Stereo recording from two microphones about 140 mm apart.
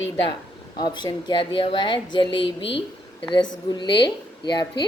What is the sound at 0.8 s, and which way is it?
A woman's voice, 30° left (ahead or behind).